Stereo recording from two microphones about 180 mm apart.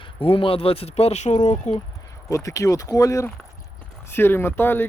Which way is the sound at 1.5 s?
25° left (ahead or behind).